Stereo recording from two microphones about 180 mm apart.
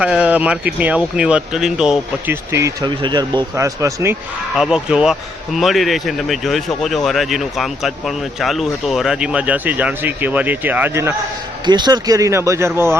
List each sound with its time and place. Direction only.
0.0 s speech: 5° right (ahead or behind)
4.5 s speech: 5° right (ahead or behind)
11.6 s speech: 25° right (ahead or behind)